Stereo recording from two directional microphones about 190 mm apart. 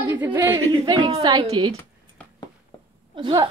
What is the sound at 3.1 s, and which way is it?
Speech, 20° right (ahead or behind).